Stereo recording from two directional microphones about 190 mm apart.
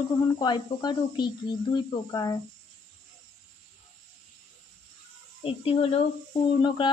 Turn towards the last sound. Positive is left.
turn(degrees=25)  # may be behind; listen again after turning